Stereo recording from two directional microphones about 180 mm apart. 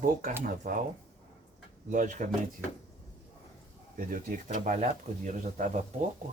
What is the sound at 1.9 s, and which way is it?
Speech, 45° right (ahead or behind).